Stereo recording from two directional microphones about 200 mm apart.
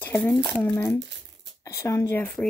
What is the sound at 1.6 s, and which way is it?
Speech, 15° left (ahead or behind).